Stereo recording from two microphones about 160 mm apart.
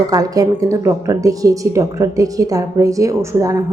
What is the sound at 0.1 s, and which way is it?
Speech, 20° right (ahead or behind).